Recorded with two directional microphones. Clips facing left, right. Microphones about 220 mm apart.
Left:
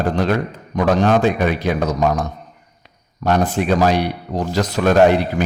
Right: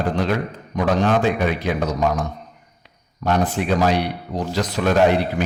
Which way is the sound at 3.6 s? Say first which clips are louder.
Left 3 dB; 45° left (ahead or behind).